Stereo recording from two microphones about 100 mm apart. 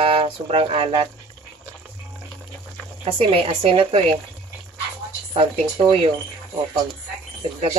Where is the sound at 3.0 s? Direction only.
75° right (ahead or behind).